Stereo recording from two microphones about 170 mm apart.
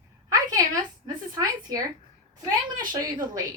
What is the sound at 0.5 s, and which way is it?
A woman's voice, 20° right (ahead or behind).